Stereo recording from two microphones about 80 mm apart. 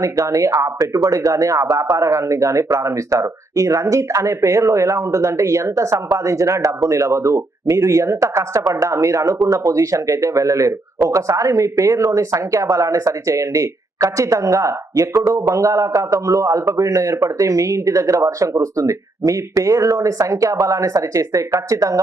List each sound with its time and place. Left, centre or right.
0.0 s a man's voice: right